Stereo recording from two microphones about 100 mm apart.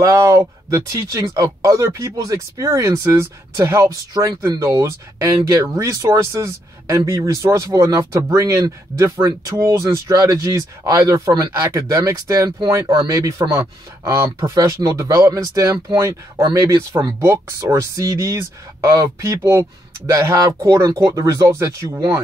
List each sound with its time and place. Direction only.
0.0 s speech: 30° right (ahead or behind)
4.1 s speech: 40° right (ahead or behind)
4.5 s speech: 30° right (ahead or behind)